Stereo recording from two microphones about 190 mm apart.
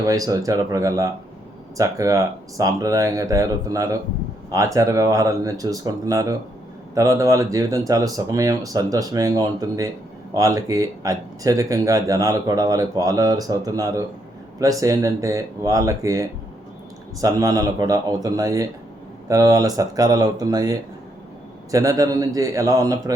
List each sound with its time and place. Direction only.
0.0 s speech: 20° right (ahead or behind)